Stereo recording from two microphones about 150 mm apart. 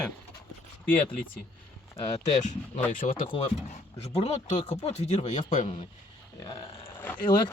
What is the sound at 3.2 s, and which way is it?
Speech, 35° left (ahead or behind).